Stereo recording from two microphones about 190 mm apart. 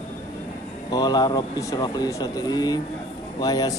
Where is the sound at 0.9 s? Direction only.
20° left (ahead or behind).